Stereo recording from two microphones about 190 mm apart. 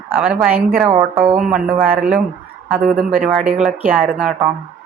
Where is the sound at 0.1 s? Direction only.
5° right (ahead or behind).